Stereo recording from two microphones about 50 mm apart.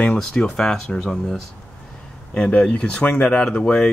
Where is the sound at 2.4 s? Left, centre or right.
Left.